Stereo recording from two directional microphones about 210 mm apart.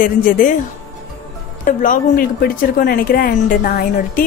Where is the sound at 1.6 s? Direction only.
40° left (ahead or behind).